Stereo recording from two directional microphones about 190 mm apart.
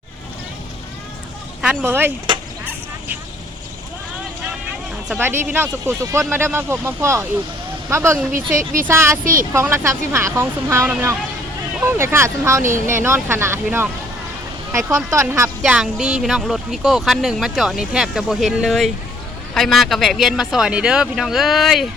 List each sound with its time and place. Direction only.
1.8 s speech: 10° right (ahead or behind)
5.0 s speech: 10° right (ahead or behind)
8.5 s speech: 45° right (ahead or behind)
8.9 s speech: 15° right (ahead or behind)
9.2 s speech: 45° right (ahead or behind)
9.5 s speech: 15° right (ahead or behind)
12.6 s speech: 45° right (ahead or behind)
13.0 s speech: 10° right (ahead or behind)
15.6 s speech: 5° right (ahead or behind)